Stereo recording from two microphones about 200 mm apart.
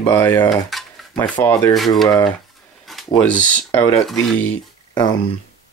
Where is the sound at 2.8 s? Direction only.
5° left (ahead or behind).